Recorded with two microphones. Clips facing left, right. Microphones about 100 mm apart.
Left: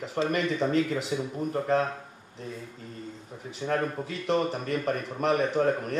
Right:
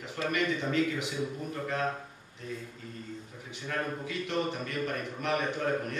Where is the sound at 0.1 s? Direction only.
35° left (ahead or behind).